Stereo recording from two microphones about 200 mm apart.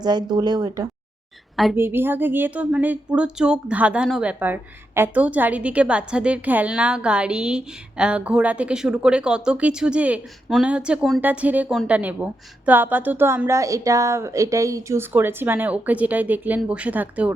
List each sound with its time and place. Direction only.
0.0 s a woman's voice: 20° right (ahead or behind)